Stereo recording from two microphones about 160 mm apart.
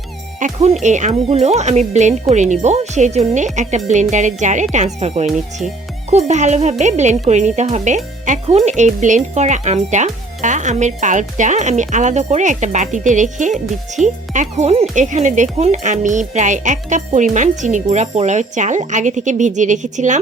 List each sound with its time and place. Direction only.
0.3 s speech: 45° right (ahead or behind)